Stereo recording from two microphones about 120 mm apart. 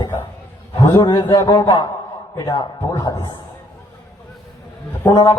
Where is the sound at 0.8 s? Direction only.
35° left (ahead or behind).